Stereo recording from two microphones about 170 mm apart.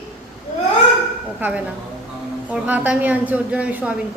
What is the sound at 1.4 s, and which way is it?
A woman's voice, 10° right (ahead or behind).